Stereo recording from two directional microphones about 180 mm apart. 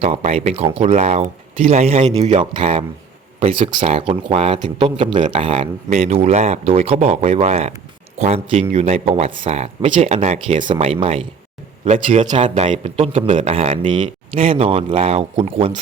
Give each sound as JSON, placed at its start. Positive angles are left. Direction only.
{"t": 0.0, "sound": "speech", "side_deg": -35}
{"t": 11.9, "sound": "a man's voice", "side_deg": -45}